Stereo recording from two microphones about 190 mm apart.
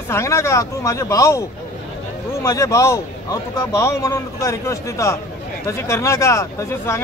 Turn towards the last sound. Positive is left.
turn(degrees=15)  # may be behind; listen again after turning